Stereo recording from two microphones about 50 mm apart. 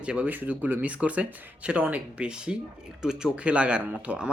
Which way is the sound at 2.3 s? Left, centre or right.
Centre.